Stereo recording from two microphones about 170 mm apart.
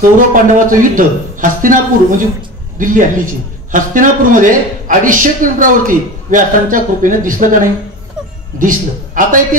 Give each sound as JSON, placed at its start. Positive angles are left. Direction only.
{"t": 0.3, "sound": "a man's voice", "side_deg": -50}
{"t": 8.5, "sound": "a man's voice", "side_deg": -50}